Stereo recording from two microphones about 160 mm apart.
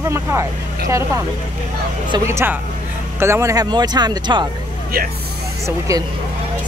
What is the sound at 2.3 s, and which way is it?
Speech, 15° right (ahead or behind).